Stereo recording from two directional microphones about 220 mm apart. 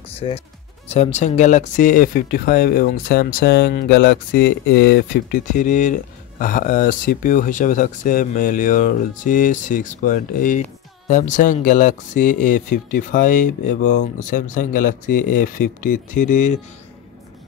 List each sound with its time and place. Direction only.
0.1 s music: 25° left (ahead or behind)
0.8 s speech: 30° left (ahead or behind)